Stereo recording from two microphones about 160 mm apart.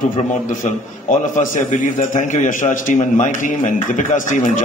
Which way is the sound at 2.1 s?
50° left (ahead or behind).